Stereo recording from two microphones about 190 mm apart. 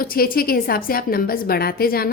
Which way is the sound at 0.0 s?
50° left (ahead or behind).